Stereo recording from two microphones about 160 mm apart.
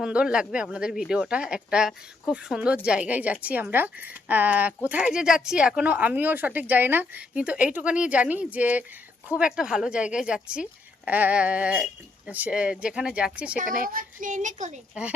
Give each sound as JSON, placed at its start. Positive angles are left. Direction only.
{"t": 0.0, "sound": "speech", "side_deg": -5}
{"t": 13.6, "sound": "speech", "side_deg": -60}